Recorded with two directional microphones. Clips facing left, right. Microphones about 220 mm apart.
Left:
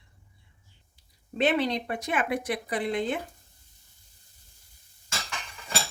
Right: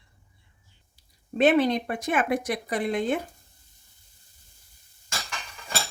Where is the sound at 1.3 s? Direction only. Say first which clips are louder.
Right 5 dB; 50° right (ahead or behind).